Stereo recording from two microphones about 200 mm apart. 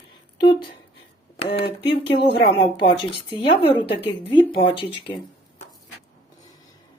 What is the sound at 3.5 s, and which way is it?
Speech, 25° left (ahead or behind).